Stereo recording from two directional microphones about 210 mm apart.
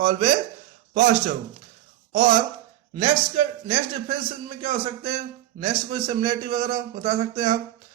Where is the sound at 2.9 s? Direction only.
25° right (ahead or behind).